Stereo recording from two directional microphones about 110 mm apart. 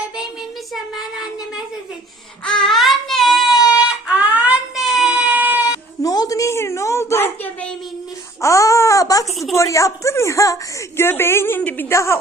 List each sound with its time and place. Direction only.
2.4 s child singing: 5° left (ahead or behind)
3.8 s baby cry: 10° right (ahead or behind)
6.0 s a sound: 35° left (ahead or behind); by 7.7 s 20° left (ahead or behind)
8.4 s baby cry: 30° left (ahead or behind)
9.6 s a woman's voice: 30° left (ahead or behind)